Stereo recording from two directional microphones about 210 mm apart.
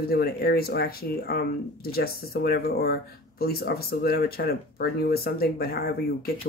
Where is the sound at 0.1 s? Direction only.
45° left (ahead or behind).